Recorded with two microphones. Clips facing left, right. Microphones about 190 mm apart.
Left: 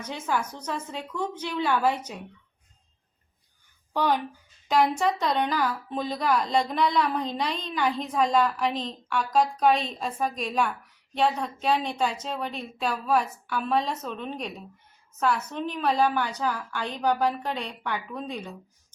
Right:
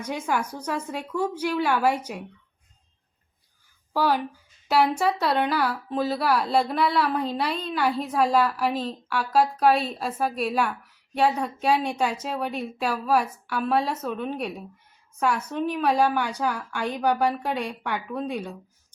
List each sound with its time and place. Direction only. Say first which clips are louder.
0.0 s speech: right 2 dB; 10° right (ahead or behind)
3.9 s speech: right 2 dB; 5° right (ahead or behind)